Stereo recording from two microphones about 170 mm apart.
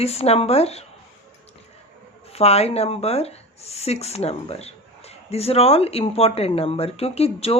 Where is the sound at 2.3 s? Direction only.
35° left (ahead or behind).